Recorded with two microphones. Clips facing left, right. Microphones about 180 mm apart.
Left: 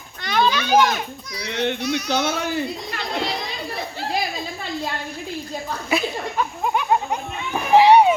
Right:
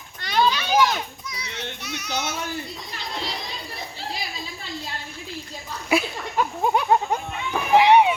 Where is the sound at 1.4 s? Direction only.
80° left.